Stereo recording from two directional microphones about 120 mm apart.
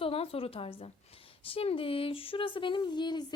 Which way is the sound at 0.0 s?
50° left (ahead or behind).